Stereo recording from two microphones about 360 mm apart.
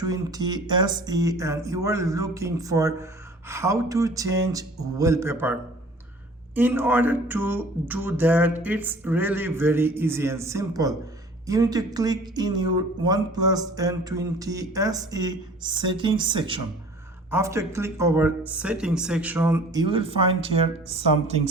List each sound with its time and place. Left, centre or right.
0.0 s speech: centre